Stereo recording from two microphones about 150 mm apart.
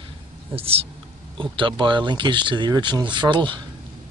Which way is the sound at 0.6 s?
40° right (ahead or behind).